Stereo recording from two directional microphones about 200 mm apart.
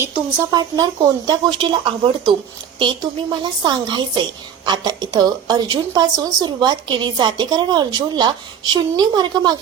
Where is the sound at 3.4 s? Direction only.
20° right (ahead or behind).